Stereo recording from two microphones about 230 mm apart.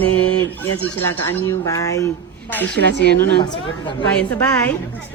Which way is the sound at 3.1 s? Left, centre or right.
Right.